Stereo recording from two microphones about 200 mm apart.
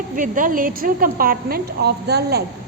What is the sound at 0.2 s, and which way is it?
A woman's voice, 40° right (ahead or behind).